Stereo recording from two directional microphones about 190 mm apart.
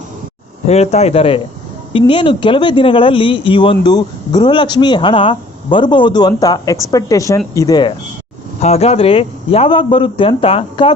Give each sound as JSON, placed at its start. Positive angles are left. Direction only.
{"t": 0.7, "sound": "speech", "side_deg": 35}
{"t": 8.6, "sound": "speech", "side_deg": 35}